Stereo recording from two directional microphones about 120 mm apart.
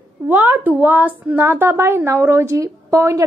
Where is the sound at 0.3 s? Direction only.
15° right (ahead or behind).